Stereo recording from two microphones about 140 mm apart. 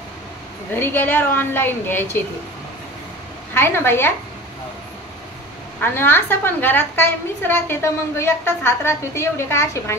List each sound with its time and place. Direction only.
0.7 s a woman's voice: 15° left (ahead or behind)
3.5 s a woman's voice: 15° left (ahead or behind)
5.8 s a woman's voice: 15° left (ahead or behind)